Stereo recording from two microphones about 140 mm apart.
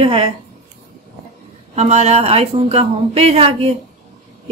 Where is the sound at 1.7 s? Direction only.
55° right (ahead or behind).